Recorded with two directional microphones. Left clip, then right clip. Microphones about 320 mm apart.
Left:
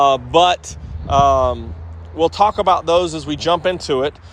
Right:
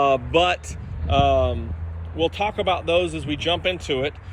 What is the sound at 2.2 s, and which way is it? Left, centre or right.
Speech, left.